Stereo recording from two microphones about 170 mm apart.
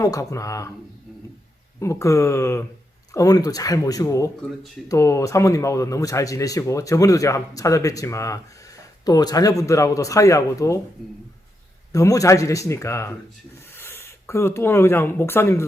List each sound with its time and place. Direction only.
0.0 s speech: 20° left (ahead or behind)
1.8 s speech: 20° left (ahead or behind)
11.9 s speech: 20° left (ahead or behind)